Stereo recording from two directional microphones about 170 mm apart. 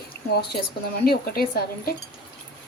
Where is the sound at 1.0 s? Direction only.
60° left (ahead or behind).